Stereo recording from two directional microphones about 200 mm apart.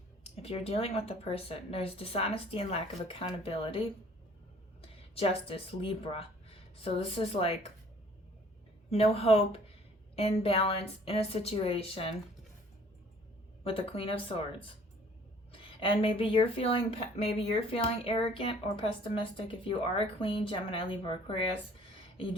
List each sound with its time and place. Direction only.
0.4 s a woman's voice: 30° left (ahead or behind)
5.1 s a woman's voice: 30° left (ahead or behind)
8.9 s a woman's voice: 30° left (ahead or behind)
13.7 s a woman's voice: 25° left (ahead or behind)
21.9 s a sound: 25° left (ahead or behind)